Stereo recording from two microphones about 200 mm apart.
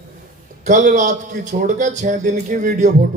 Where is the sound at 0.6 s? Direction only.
40° right (ahead or behind).